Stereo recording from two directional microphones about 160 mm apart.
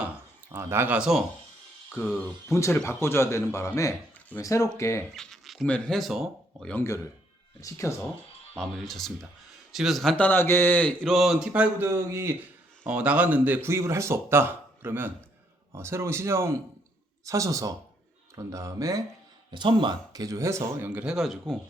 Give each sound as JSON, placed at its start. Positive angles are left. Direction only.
{"t": 0.5, "sound": "speech", "side_deg": -15}
{"t": 2.5, "sound": "speech", "side_deg": 20}
{"t": 5.1, "sound": "speech", "side_deg": 0}
{"t": 7.6, "sound": "speech", "side_deg": 20}
{"t": 8.5, "sound": "speech", "side_deg": 0}